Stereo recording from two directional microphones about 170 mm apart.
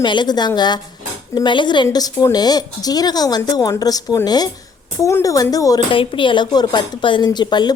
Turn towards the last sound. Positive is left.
turn(degrees=25)  # may be behind; listen again after turning